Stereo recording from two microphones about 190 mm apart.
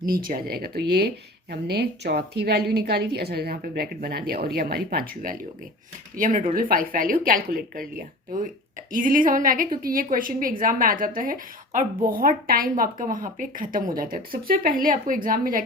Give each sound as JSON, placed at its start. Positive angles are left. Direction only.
{"t": 0.0, "sound": "a woman's voice", "side_deg": -50}